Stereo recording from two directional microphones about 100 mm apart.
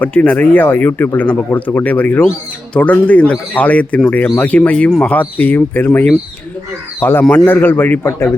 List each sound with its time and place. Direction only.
0.0 s speech: 15° left (ahead or behind)